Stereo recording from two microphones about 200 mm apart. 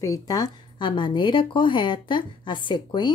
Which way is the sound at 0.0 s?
15° left (ahead or behind).